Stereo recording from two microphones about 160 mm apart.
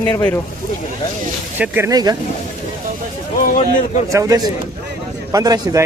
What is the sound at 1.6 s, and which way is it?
Speech, 20° right (ahead or behind).